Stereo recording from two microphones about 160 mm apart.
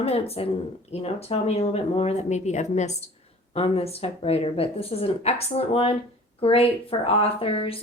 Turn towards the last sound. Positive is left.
turn(degrees=35)  # may be behind; listen again after turning